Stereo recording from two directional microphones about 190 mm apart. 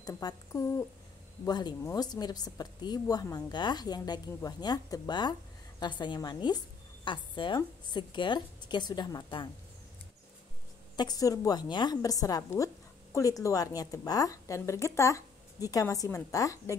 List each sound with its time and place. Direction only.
0.0 s speech: 20° left (ahead or behind)
11.0 s a woman's voice: 20° left (ahead or behind)